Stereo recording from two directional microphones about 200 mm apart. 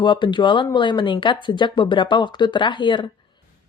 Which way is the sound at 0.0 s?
25° left (ahead or behind).